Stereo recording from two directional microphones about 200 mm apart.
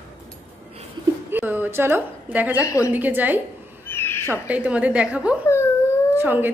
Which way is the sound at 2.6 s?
15° left (ahead or behind).